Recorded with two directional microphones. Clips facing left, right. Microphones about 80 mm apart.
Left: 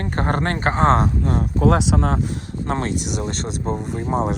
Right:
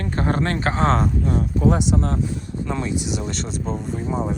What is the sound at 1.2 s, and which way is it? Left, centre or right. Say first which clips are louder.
Speech: left 1 dB; left.